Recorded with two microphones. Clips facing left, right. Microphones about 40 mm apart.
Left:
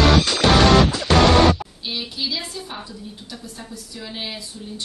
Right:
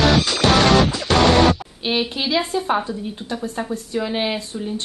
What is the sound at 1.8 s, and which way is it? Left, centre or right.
Speech, right.